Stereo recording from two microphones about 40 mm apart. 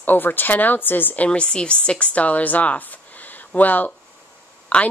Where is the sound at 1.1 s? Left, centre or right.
Left.